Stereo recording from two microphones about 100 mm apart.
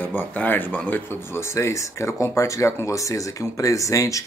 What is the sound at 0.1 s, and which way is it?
Speech, 20° left (ahead or behind).